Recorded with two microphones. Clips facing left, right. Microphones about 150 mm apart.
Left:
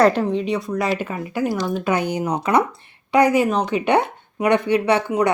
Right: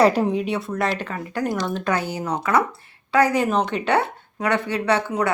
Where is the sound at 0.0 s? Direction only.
10° right (ahead or behind).